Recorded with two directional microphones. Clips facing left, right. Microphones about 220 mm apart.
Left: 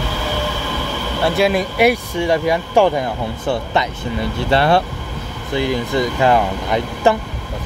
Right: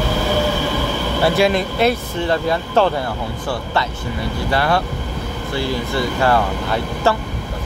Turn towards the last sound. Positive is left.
turn(degrees=15)  # may be behind; listen again after turning